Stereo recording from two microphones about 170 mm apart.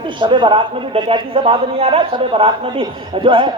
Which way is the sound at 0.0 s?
30° right (ahead or behind).